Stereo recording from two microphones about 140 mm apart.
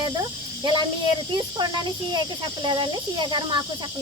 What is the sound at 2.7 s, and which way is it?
Speech, 30° right (ahead or behind).